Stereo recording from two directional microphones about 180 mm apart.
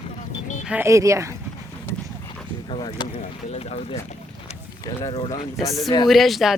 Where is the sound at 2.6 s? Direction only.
25° left (ahead or behind).